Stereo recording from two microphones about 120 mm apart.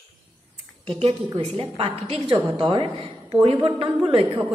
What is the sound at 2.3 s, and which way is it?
A woman's voice, 35° right (ahead or behind).